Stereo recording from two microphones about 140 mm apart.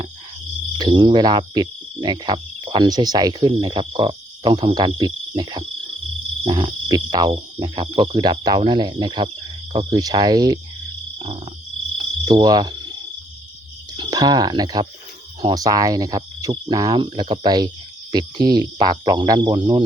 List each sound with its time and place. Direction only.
0.8 s cricket: 35° right (ahead or behind)
9.7 s speech: 30° right (ahead or behind)
12.2 s cricket: 30° right (ahead or behind)
13.9 s speech: 30° right (ahead or behind)